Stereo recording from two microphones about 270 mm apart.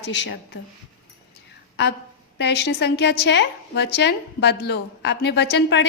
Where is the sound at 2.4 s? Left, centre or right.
Left.